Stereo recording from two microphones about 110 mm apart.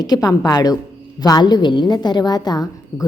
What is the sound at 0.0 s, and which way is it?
A woman's voice, 35° left (ahead or behind).